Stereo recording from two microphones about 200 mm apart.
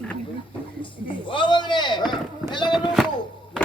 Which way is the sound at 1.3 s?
25° left (ahead or behind).